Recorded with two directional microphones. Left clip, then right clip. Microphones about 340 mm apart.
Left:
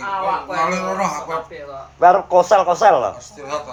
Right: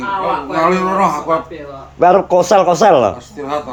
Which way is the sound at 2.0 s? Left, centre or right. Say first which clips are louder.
Right 2 dB; right.